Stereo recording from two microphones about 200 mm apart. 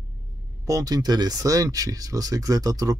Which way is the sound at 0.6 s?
15° right (ahead or behind).